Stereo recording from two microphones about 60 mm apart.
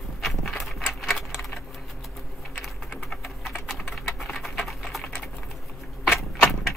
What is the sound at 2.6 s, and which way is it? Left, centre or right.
Typing, centre.